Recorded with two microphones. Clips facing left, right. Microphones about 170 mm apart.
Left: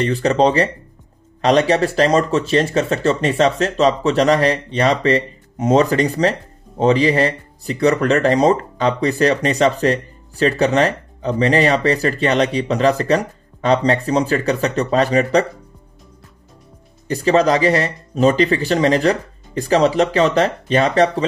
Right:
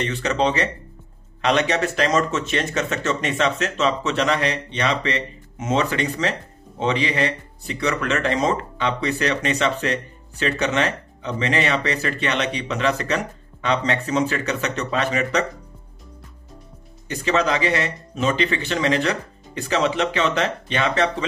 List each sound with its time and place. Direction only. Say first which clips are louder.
0.0 s speech: left 6 dB; 35° left (ahead or behind)
17.1 s speech: left 7 dB; 35° left (ahead or behind)